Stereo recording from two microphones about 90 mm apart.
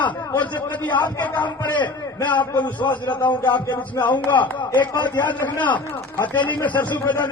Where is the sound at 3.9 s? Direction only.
20° left (ahead or behind).